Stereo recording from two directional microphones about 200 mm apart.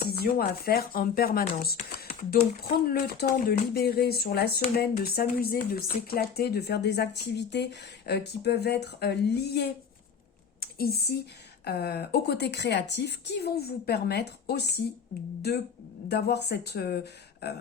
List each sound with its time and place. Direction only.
0.1 s speech: 50° left (ahead or behind)